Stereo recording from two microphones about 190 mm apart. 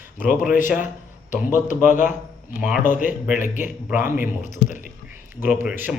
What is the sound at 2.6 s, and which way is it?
Speech, 5° right (ahead or behind).